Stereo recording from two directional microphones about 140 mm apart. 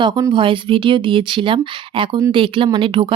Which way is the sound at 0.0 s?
30° right (ahead or behind).